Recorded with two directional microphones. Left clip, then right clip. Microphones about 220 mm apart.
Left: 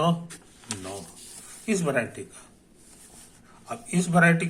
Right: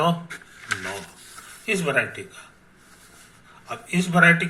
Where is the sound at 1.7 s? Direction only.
20° left (ahead or behind).